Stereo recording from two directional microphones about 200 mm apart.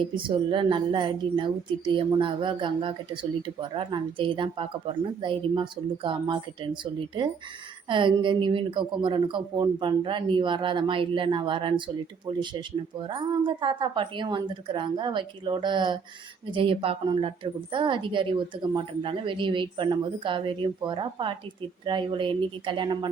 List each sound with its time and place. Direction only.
0.2 s a woman's voice: 25° right (ahead or behind)
7.9 s a woman's voice: 25° right (ahead or behind)